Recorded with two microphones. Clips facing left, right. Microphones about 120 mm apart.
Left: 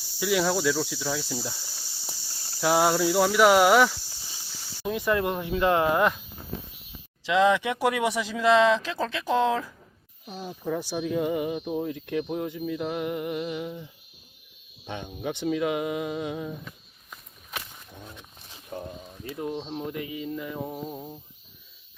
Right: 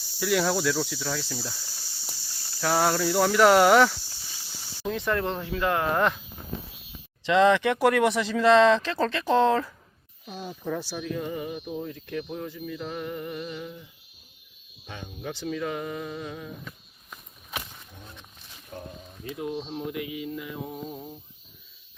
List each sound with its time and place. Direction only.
0.2 s speech: centre (ahead or behind); by 5.9 s 20° left (ahead or behind)
5.9 s speech: 5° left (ahead or behind)
7.3 s speech: 5° left (ahead or behind); by 13.8 s 20° left (ahead or behind)
14.8 s speech: 20° left (ahead or behind)
18.0 s speech: 5° left (ahead or behind)
18.7 s speech: 20° left (ahead or behind)
19.6 s speech: centre (ahead or behind)
20.7 s speech: 10° left (ahead or behind)